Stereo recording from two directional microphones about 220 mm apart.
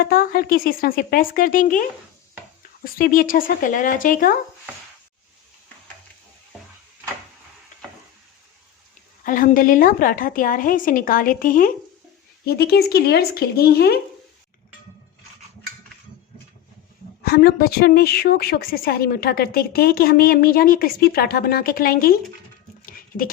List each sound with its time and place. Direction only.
0.0 s a woman's voice: 40° left (ahead or behind)
2.8 s a woman's voice: 40° left (ahead or behind)
9.2 s a woman's voice: 40° left (ahead or behind)
17.2 s a woman's voice: 45° left (ahead or behind)
22.9 s a sound: 40° left (ahead or behind)